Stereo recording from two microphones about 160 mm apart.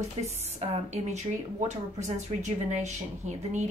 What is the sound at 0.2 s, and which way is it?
A woman's voice, 40° right (ahead or behind).